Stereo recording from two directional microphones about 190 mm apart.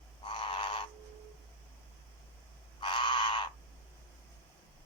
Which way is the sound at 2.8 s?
25° left (ahead or behind).